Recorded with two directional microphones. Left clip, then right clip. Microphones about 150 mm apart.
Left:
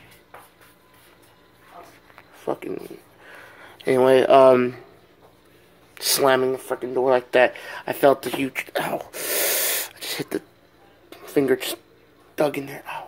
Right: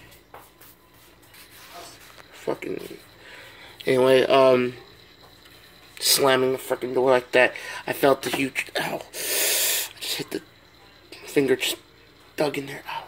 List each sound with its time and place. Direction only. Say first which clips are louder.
2.4 s speech: left 1 dB; centre (ahead or behind)
3.3 s a sound: left 1 dB; 5° left (ahead or behind)
5.9 s a sound: left 1 dB; 10° left (ahead or behind)
6.5 s speech: even; 20° right (ahead or behind)
7.1 s speech: left 1 dB; centre (ahead or behind)
8.5 s sneeze: left 1 dB; 15° left (ahead or behind)
9.7 s gasp: right 1 dB; 90° left
12.4 s speech: left 3 dB; 15° left (ahead or behind)